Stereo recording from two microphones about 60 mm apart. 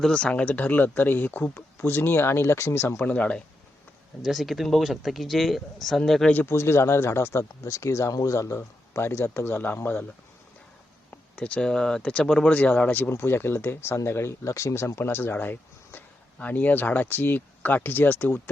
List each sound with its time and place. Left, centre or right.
0.1 s speech: centre; by 3.0 s left
3.0 s speech: left
4.2 s speech: centre
6.5 s speech: left
8.1 s speech: left
8.5 s speech: left
11.3 s speech: left
12.5 s speech: left
13.1 s speech: left
14.9 s speech: left